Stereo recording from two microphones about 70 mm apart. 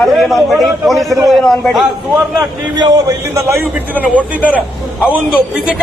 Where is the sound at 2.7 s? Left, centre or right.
Right.